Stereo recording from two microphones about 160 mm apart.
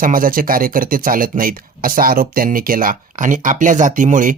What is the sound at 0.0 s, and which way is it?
Speech, 60° right (ahead or behind).